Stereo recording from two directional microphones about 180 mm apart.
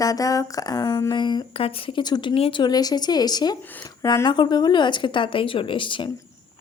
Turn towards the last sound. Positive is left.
turn(degrees=25)  # may be behind; listen again after turning